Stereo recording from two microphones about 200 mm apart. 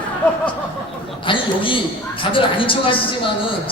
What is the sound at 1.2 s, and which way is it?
A man's voice, 25° left (ahead or behind).